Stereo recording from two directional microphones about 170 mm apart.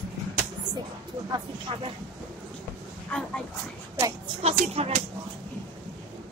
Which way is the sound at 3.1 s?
5° left (ahead or behind).